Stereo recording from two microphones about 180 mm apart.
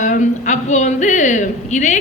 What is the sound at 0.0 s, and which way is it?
A woman's voice, 45° left (ahead or behind).